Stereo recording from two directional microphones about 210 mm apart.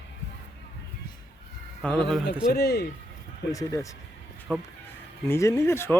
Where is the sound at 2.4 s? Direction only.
45° left (ahead or behind).